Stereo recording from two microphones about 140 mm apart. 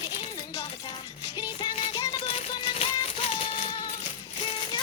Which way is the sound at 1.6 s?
30° left (ahead or behind).